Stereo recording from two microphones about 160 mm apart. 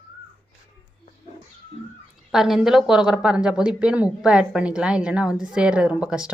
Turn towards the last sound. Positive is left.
turn(degrees=-5)  # may be behind; listen again after turning